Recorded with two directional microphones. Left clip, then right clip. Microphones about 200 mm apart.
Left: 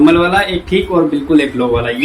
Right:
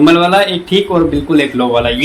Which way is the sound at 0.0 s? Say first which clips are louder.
Right 2 dB; 35° right (ahead or behind).